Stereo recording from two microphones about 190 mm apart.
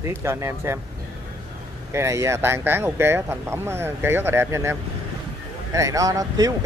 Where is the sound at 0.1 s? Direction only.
15° right (ahead or behind).